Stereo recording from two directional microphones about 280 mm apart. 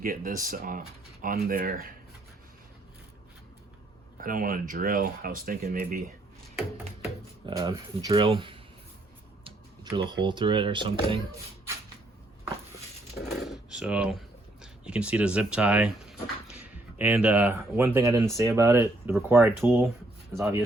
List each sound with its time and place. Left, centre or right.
0.0 s speech: right
4.2 s speech: right
7.4 s speech: centre
10.0 s speech: centre
13.4 s speech: centre